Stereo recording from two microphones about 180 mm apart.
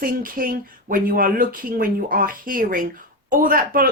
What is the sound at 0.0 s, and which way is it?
Speech, 50° right (ahead or behind).